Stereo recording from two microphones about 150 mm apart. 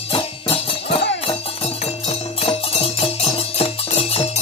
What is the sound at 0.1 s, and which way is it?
Music, 40° left (ahead or behind).